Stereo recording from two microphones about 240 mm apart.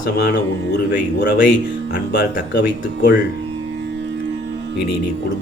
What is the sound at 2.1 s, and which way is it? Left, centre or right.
Speech, left.